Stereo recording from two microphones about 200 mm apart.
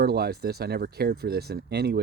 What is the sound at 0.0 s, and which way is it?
Speech, 50° right (ahead or behind).